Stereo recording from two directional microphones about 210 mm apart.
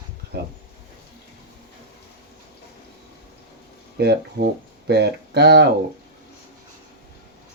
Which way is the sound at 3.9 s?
50° right (ahead or behind).